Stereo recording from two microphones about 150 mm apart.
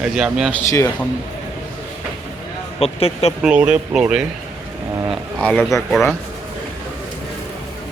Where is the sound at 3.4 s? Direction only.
5° right (ahead or behind).